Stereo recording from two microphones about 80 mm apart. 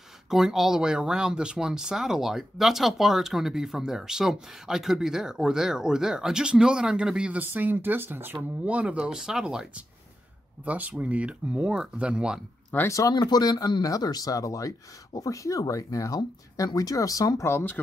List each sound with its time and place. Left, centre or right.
0.3 s speech: centre
12.7 s speech: left
13.1 s speech: left
17.5 s speech: left